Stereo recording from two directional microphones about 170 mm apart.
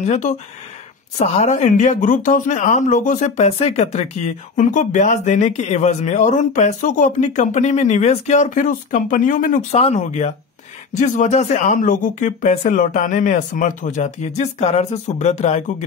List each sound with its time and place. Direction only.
0.0 s speech: 45° left (ahead or behind)
9.8 s speech: 40° left (ahead or behind)